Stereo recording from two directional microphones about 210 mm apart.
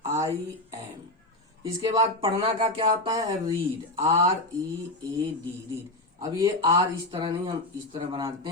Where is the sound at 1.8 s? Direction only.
20° right (ahead or behind).